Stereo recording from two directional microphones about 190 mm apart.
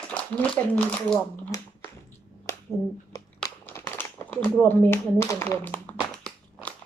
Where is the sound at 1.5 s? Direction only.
20° left (ahead or behind).